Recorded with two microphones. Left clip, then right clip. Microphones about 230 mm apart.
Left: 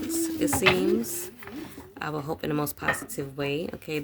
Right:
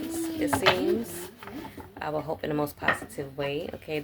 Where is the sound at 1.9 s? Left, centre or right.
Left.